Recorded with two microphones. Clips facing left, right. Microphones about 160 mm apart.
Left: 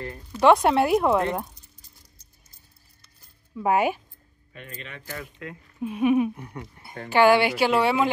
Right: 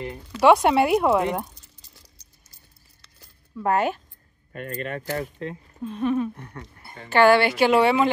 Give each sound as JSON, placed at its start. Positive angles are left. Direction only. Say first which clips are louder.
{"t": 0.4, "sound": "speech", "louder": "right 1 dB", "side_deg": 0}
{"t": 1.5, "sound": "a sound", "louder": "right 2 dB", "side_deg": -85}
{"t": 3.5, "sound": "speech", "louder": "even", "side_deg": 10}
{"t": 4.5, "sound": "speech", "louder": "right 10 dB", "side_deg": -50}
{"t": 5.1, "sound": "speech", "louder": "right 4 dB", "side_deg": -35}
{"t": 5.8, "sound": "speech", "louder": "left 3 dB", "side_deg": 10}